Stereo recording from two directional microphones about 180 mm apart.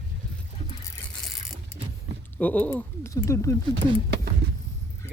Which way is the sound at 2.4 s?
10° left (ahead or behind).